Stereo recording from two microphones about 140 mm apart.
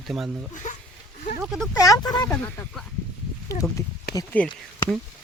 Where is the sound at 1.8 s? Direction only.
25° left (ahead or behind).